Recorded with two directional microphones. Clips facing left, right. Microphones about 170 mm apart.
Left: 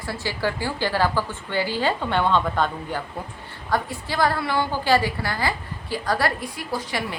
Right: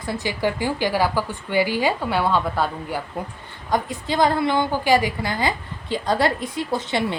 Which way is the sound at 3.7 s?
20° right (ahead or behind).